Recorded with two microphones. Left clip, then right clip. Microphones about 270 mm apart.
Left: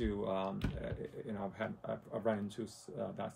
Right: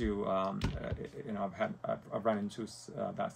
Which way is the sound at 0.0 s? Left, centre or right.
Centre.